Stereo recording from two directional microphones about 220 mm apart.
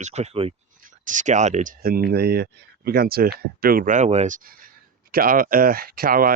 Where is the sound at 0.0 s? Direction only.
30° right (ahead or behind).